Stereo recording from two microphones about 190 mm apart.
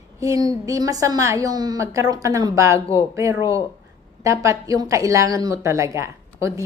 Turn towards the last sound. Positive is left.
turn(degrees=-15)  # may be behind; listen again after turning